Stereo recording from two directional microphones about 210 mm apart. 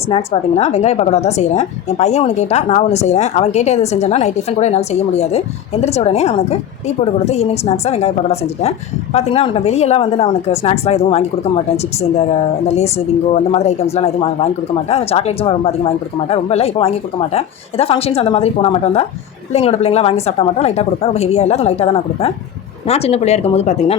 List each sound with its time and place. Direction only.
0.1 s a woman's voice: 30° left (ahead or behind)